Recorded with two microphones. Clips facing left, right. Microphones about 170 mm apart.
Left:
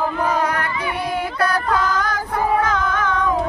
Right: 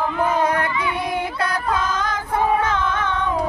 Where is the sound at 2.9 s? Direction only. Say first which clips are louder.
Left 2 dB; 30° right (ahead or behind).